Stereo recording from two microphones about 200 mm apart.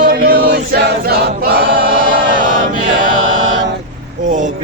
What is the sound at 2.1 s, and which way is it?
Choir, 40° right (ahead or behind).